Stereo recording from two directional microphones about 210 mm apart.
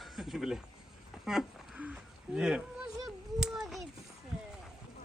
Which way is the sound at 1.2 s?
Centre (ahead or behind).